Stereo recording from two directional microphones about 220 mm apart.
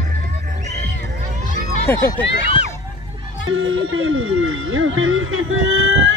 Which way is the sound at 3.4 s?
60° right (ahead or behind).